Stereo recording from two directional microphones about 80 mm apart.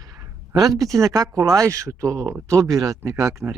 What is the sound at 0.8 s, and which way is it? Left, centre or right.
Speech, right.